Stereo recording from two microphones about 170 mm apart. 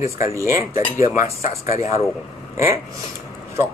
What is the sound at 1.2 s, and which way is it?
Speech, 40° left (ahead or behind).